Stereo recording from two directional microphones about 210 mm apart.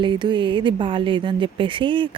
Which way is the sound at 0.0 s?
20° right (ahead or behind).